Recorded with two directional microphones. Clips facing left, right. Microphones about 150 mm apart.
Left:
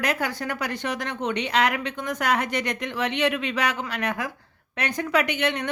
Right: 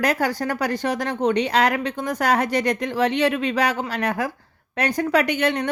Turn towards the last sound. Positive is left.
turn(degrees=-35)  # may be behind; listen again after turning